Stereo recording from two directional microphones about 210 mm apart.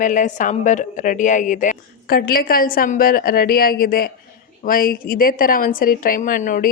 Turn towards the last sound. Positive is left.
turn(degrees=35)  # may be behind; listen again after turning